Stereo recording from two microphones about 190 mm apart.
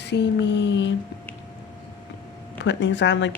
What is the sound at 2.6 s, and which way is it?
Speech, 70° left (ahead or behind).